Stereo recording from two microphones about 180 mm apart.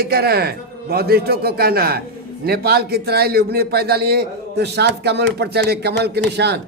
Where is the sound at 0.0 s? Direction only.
60° right (ahead or behind).